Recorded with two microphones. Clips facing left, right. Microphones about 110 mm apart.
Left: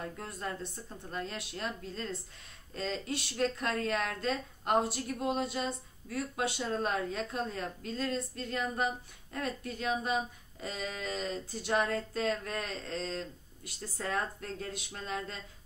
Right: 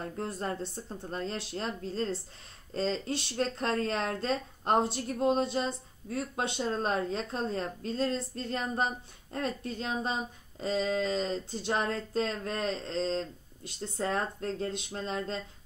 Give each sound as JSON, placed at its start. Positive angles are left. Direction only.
{"t": 0.0, "sound": "speech", "side_deg": -30}